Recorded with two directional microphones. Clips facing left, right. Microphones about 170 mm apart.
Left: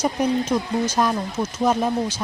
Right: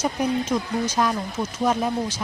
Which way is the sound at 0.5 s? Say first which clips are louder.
Left 2 dB; 30° left (ahead or behind).